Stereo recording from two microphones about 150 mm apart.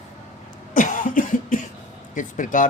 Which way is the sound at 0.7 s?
60° left (ahead or behind).